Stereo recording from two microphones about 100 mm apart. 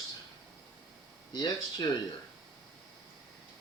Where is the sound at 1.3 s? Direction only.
45° left (ahead or behind).